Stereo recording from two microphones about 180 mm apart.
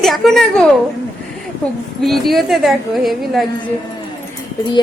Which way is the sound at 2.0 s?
Centre (ahead or behind).